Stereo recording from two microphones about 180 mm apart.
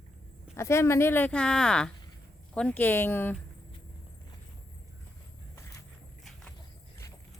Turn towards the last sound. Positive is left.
turn(degrees=15)  # may be behind; listen again after turning